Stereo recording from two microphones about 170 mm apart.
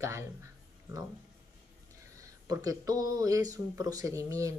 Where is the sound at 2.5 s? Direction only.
20° right (ahead or behind).